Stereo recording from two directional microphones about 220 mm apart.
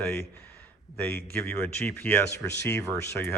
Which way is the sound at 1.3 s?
10° left (ahead or behind).